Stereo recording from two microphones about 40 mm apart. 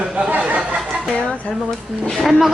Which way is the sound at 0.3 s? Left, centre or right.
Right.